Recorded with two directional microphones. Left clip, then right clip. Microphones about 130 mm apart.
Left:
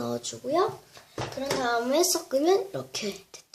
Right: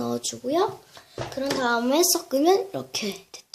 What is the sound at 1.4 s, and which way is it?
Speech, 45° right (ahead or behind).